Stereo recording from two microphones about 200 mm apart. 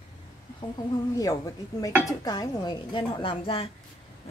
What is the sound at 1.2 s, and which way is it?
Speech, 15° left (ahead or behind).